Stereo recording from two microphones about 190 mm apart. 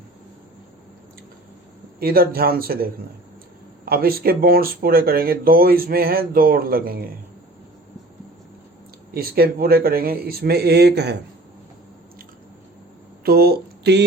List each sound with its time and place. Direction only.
2.0 s speech: 50° right (ahead or behind)
9.1 s speech: 55° right (ahead or behind)
13.2 s speech: 55° right (ahead or behind)